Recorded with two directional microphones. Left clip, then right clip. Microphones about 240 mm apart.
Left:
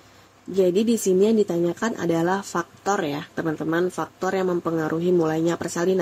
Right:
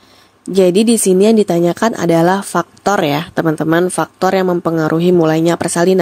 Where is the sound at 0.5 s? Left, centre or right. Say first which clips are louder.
Right 9 dB; right.